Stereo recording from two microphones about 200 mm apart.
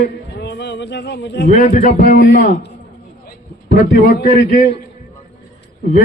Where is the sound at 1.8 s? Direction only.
40° left (ahead or behind).